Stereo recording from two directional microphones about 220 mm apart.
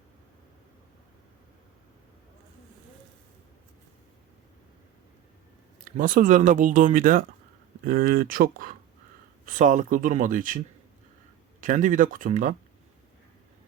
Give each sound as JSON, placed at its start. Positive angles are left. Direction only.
{"t": 6.0, "sound": "speech", "side_deg": -40}
{"t": 11.6, "sound": "speech", "side_deg": -35}